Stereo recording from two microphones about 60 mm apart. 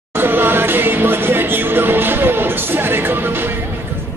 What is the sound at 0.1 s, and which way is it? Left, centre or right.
Music, right.